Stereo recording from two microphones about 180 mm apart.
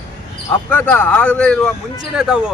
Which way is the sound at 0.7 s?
10° left (ahead or behind).